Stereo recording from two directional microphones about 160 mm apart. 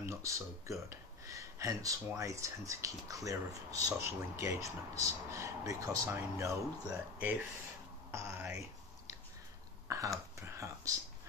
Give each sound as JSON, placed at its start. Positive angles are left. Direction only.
{"t": 0.0, "sound": "speech", "side_deg": -20}
{"t": 0.8, "sound": "a sound", "side_deg": -20}
{"t": 2.1, "sound": "speech", "side_deg": -20}
{"t": 8.1, "sound": "music", "side_deg": -20}
{"t": 9.8, "sound": "a sound", "side_deg": -20}
{"t": 10.3, "sound": "speech", "side_deg": -20}